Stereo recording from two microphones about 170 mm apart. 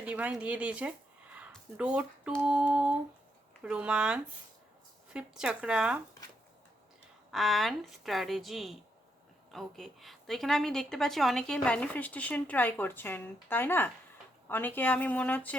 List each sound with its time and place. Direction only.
0.0 s speech: 5° right (ahead or behind)
7.3 s a woman's voice: centre (ahead or behind)